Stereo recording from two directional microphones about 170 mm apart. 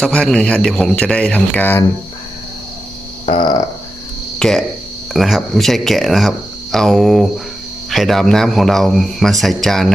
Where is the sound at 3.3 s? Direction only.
25° left (ahead or behind).